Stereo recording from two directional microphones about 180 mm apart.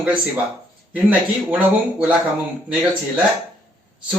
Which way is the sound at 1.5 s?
5° right (ahead or behind).